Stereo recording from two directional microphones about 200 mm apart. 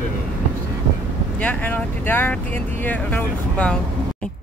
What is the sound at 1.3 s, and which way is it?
Speech, 5° left (ahead or behind).